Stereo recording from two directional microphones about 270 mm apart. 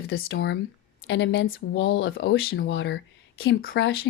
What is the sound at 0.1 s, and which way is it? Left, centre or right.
Speech, left.